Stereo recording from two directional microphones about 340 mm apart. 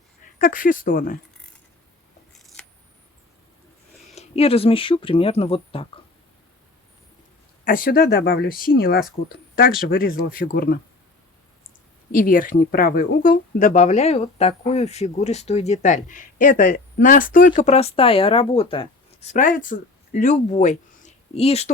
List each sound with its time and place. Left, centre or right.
0.3 s speech: left
2.6 s scissors: centre
4.1 s speech: centre
7.6 s speech: left
12.1 s speech: left